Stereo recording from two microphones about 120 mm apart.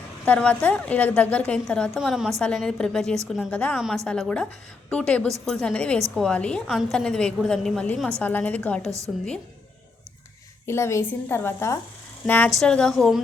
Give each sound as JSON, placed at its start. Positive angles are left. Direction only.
{"t": 0.3, "sound": "a woman's voice", "side_deg": 10}
{"t": 3.5, "sound": "a woman's voice", "side_deg": 10}
{"t": 8.2, "sound": "a woman's voice", "side_deg": 15}
{"t": 9.1, "sound": "a woman's voice", "side_deg": 0}
{"t": 10.7, "sound": "a woman's voice", "side_deg": 20}